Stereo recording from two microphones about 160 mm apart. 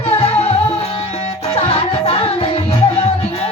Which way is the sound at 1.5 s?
40° left (ahead or behind).